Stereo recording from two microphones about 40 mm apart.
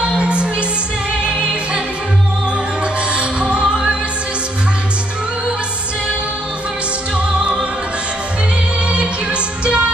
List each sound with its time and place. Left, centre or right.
0.0 s music: right
3.1 s music: right
8.9 s music: right